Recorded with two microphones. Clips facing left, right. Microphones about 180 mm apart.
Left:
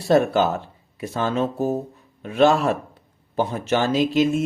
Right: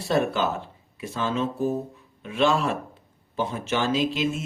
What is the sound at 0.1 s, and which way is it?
Speech, 45° left (ahead or behind).